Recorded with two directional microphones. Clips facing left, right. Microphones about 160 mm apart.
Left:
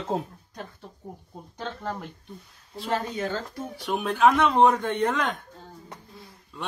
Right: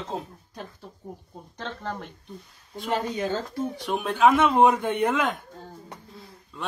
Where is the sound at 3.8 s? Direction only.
Centre (ahead or behind).